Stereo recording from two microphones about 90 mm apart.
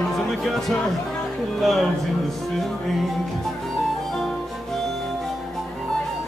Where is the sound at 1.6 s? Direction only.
Centre (ahead or behind).